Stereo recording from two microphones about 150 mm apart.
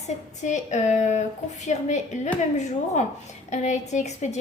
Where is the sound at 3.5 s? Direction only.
50° left (ahead or behind).